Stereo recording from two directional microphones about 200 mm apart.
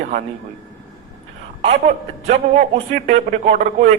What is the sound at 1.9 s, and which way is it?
A man's voice, 35° right (ahead or behind).